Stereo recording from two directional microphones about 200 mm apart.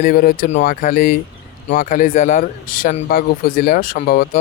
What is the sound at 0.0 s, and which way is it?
Speech, 45° left (ahead or behind).